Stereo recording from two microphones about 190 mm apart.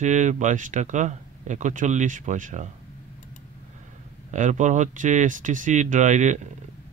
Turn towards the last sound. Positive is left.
turn(degrees=-40)  # may be behind; listen again after turning